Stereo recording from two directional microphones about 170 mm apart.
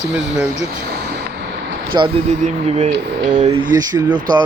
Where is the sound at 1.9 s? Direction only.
25° right (ahead or behind).